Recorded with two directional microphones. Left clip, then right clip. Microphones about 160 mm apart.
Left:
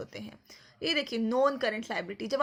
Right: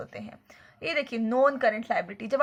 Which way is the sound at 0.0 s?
45° left (ahead or behind).